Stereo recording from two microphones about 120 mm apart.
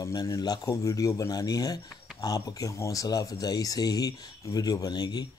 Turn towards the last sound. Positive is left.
turn(degrees=35)  # may be behind; listen again after turning